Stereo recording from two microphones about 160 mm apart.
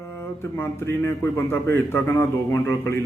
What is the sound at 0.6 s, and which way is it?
A man's voice, 15° left (ahead or behind).